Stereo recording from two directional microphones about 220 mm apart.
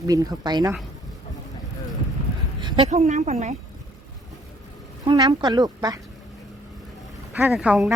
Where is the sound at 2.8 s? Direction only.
30° right (ahead or behind).